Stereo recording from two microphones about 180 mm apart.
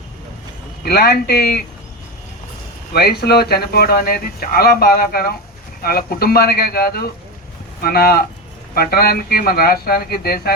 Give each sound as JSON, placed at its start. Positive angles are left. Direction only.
{"t": 0.8, "sound": "speech", "side_deg": 60}
{"t": 2.9, "sound": "speech", "side_deg": 60}